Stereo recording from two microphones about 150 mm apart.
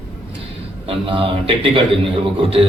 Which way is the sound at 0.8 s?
35° right (ahead or behind).